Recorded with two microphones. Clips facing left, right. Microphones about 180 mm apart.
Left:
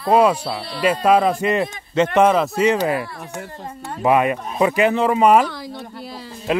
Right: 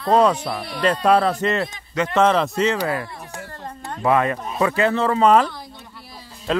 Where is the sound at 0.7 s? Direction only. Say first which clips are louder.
Left 1 dB; 10° left (ahead or behind).